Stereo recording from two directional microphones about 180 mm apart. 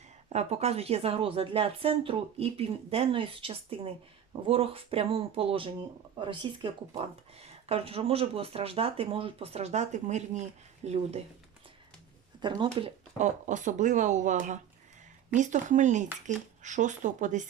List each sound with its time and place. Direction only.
0.3 s a woman's voice: 35° right (ahead or behind)
7.7 s a woman's voice: 30° right (ahead or behind)
12.4 s speech: 25° right (ahead or behind)
12.6 s speech: 40° right (ahead or behind)